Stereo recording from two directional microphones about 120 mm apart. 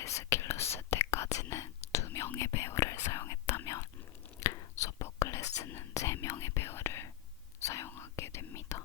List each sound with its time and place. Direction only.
0.0 s whispering: 25° left (ahead or behind)